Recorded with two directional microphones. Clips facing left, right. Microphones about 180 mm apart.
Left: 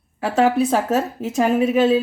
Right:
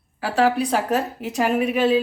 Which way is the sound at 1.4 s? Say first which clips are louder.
Left 3 dB; 40° left (ahead or behind).